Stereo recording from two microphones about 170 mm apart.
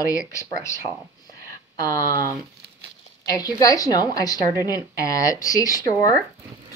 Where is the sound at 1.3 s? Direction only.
20° left (ahead or behind).